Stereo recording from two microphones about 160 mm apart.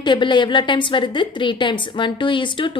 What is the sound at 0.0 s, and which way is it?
A woman's voice, 30° left (ahead or behind).